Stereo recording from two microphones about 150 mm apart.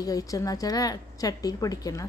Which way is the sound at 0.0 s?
25° left (ahead or behind).